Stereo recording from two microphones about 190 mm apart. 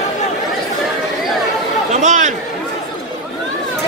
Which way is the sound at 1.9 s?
40° right (ahead or behind).